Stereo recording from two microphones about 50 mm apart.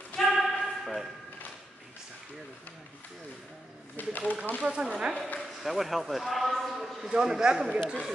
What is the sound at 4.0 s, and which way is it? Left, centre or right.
Speech, left.